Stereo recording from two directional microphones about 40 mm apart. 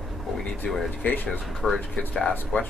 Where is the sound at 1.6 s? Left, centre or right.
Centre.